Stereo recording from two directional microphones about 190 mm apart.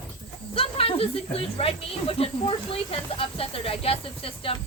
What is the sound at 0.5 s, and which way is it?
Speech, 30° left (ahead or behind).